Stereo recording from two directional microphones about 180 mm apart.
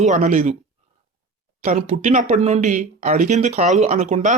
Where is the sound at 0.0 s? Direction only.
45° right (ahead or behind).